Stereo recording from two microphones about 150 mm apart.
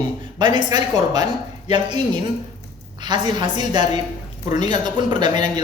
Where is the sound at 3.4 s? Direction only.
30° right (ahead or behind).